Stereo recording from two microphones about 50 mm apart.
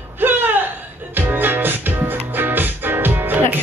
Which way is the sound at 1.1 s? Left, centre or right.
Right.